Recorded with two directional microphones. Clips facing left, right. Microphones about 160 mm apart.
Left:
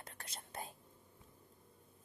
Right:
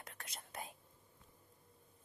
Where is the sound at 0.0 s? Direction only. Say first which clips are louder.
Left 1 dB; 30° left (ahead or behind).